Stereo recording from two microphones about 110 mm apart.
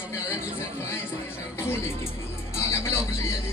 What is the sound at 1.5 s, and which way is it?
Music, 25° left (ahead or behind).